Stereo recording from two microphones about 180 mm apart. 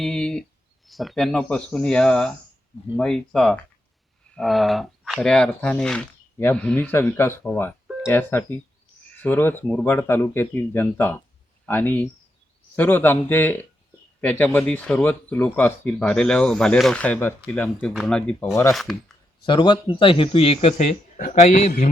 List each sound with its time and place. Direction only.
0.0 s a sound: 5° left (ahead or behind)
0.9 s speech: centre (ahead or behind)
19.5 s speech: 25° left (ahead or behind); by 21.8 s 40° left (ahead or behind)